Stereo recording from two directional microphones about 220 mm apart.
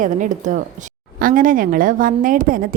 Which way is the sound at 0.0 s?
35° right (ahead or behind).